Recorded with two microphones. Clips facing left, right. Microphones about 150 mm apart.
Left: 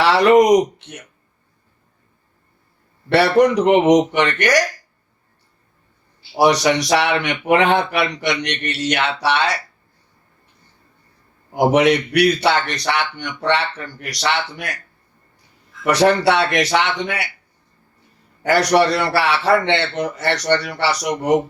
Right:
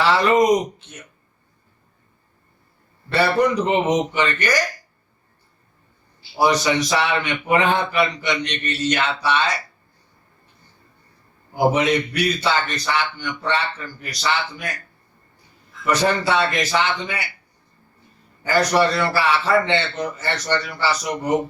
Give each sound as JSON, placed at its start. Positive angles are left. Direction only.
{"t": 0.0, "sound": "speech", "side_deg": 70}
{"t": 3.1, "sound": "a man's voice", "side_deg": 75}
{"t": 6.3, "sound": "a man's voice", "side_deg": 70}
{"t": 11.5, "sound": "a man's voice", "side_deg": 70}
{"t": 15.8, "sound": "a man's voice", "side_deg": 70}
{"t": 18.4, "sound": "a man's voice", "side_deg": 75}